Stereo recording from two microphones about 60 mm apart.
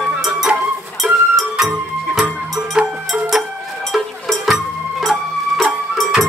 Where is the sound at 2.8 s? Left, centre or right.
Centre.